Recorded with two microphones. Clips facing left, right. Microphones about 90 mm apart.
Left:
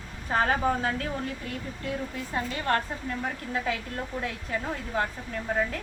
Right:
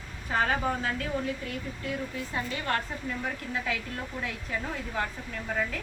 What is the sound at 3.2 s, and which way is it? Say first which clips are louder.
Speech: left 4 dB; 30° left (ahead or behind).